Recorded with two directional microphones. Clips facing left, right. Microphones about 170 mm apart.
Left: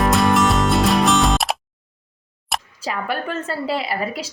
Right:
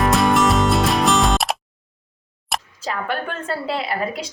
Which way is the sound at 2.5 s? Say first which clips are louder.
Even; centre (ahead or behind).